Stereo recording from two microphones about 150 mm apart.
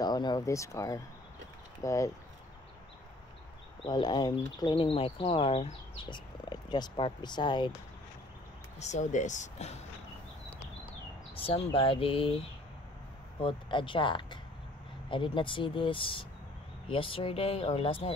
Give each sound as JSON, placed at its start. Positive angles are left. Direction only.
{"t": 0.0, "sound": "speech", "side_deg": 25}
{"t": 3.8, "sound": "speech", "side_deg": 30}
{"t": 8.7, "sound": "speech", "side_deg": 50}
{"t": 11.3, "sound": "speech", "side_deg": 35}